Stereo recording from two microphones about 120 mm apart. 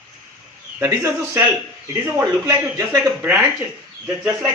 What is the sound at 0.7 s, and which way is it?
A man's voice, 25° right (ahead or behind).